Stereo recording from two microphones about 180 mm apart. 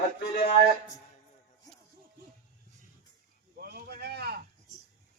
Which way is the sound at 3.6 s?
60° right (ahead or behind).